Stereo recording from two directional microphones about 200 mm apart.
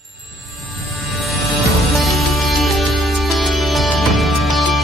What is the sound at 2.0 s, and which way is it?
Music, centre (ahead or behind).